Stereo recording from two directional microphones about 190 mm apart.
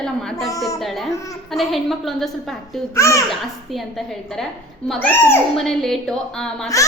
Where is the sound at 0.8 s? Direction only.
Centre (ahead or behind).